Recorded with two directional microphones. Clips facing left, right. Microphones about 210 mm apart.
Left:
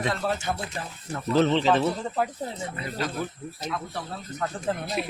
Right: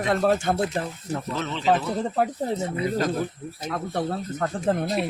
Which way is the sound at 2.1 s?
50° right (ahead or behind).